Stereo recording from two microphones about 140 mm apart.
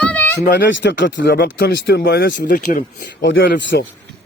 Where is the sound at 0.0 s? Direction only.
10° left (ahead or behind).